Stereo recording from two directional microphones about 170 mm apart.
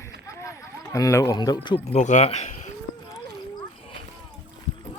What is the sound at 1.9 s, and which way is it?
Speech, 45° left (ahead or behind).